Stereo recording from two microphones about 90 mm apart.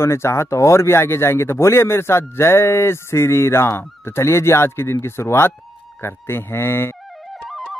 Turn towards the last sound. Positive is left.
turn(degrees=25)  # may be behind; listen again after turning